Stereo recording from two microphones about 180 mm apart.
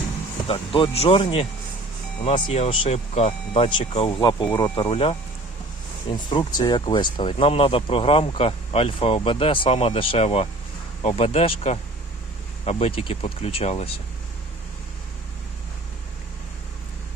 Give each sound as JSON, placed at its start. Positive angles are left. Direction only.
{"t": 0.4, "sound": "speech", "side_deg": 30}